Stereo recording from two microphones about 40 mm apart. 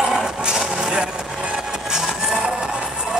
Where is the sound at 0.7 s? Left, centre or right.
Right.